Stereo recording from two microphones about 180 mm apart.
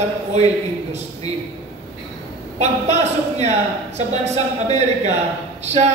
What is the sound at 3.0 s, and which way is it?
A man's voice, 40° right (ahead or behind).